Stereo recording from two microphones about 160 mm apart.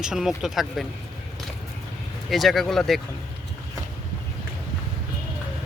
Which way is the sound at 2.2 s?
Centre (ahead or behind).